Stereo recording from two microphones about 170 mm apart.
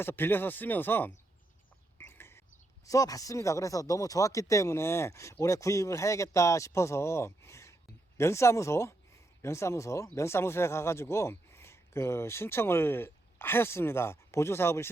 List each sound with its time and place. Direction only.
0.0 s speech: 10° left (ahead or behind)
2.0 s a sound: 15° left (ahead or behind)
2.8 s speech: 20° left (ahead or behind)